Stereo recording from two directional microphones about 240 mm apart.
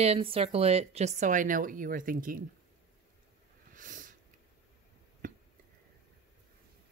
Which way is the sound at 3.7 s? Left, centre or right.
Right.